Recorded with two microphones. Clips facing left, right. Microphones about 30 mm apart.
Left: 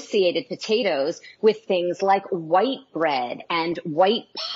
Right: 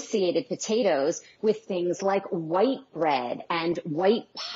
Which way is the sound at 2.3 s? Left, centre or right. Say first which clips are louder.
Left 4 dB; left.